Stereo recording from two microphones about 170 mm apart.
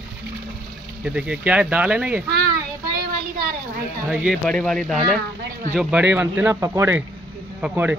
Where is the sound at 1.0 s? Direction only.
5° right (ahead or behind).